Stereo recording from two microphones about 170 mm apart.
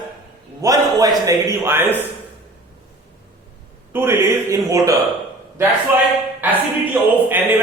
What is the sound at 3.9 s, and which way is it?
A man's voice, 15° right (ahead or behind).